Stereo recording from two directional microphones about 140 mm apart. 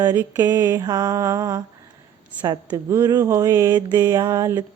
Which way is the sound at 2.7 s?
25° right (ahead or behind).